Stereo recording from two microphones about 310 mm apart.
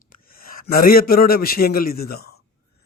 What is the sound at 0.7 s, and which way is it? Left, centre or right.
A man's voice, left.